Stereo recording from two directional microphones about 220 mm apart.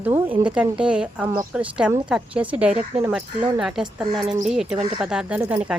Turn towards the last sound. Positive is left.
turn(degrees=-5)  # may be behind; listen again after turning